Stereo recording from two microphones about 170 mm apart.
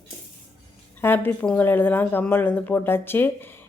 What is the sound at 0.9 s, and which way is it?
Speech, 10° left (ahead or behind).